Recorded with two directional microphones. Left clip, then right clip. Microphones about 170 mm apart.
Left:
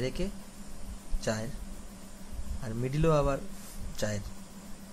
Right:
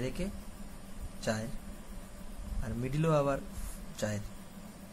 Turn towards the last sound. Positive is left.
turn(degrees=20)  # may be behind; listen again after turning